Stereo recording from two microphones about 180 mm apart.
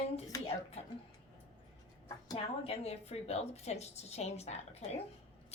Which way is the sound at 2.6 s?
35° left (ahead or behind).